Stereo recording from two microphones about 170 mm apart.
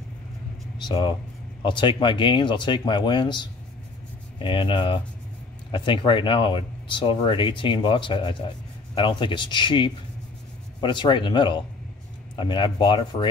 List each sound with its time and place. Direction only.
0.7 s speech: 25° left (ahead or behind)